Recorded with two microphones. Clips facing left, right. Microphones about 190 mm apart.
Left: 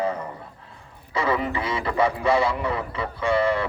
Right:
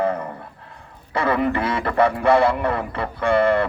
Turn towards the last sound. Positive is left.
turn(degrees=-55)  # may be behind; listen again after turning